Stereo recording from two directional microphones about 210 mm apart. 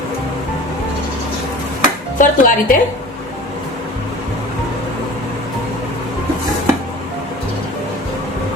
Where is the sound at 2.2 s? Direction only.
40° left (ahead or behind).